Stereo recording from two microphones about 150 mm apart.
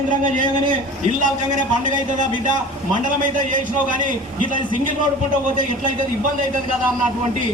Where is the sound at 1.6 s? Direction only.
60° right (ahead or behind).